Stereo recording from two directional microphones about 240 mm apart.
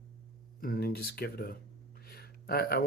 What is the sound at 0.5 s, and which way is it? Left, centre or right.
Speech, left.